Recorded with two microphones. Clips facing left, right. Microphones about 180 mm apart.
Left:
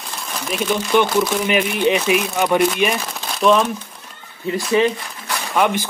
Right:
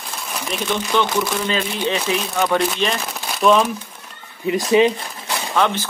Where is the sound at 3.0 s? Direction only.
Centre (ahead or behind).